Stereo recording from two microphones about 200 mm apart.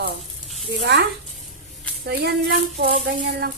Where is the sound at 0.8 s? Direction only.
60° right (ahead or behind).